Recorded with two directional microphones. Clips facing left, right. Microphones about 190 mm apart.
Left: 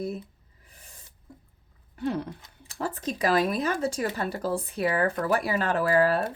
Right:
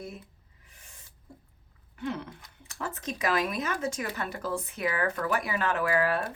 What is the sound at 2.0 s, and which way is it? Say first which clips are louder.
Speech: left 5 dB; 35° left (ahead or behind).